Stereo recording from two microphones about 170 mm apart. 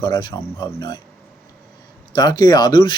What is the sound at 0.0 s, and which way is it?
Speech, 25° left (ahead or behind).